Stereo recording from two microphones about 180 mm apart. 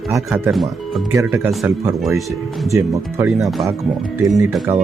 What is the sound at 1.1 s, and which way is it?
Speech, 15° right (ahead or behind).